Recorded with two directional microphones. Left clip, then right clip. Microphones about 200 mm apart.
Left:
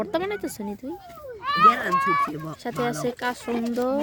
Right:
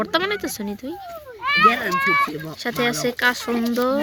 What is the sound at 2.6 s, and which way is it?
Speech, 10° left (ahead or behind).